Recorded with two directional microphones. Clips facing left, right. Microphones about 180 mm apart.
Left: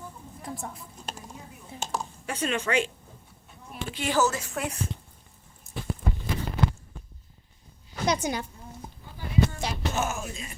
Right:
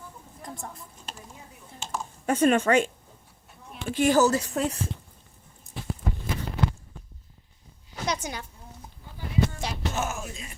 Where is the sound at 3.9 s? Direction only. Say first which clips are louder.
Right 5 dB; 45° right (ahead or behind).